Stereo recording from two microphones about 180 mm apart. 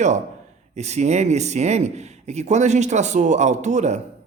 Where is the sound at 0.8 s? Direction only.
40° right (ahead or behind).